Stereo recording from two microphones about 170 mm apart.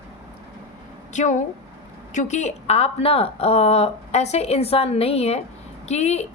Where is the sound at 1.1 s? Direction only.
45° left (ahead or behind).